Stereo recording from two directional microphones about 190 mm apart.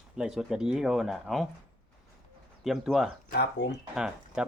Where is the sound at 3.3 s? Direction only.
60° left (ahead or behind).